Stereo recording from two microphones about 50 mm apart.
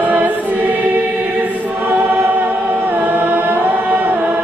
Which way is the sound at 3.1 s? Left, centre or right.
Right.